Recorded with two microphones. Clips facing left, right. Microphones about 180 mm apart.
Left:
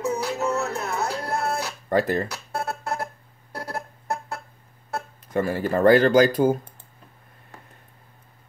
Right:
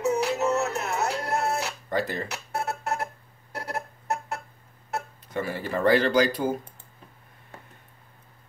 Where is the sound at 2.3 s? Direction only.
20° right (ahead or behind).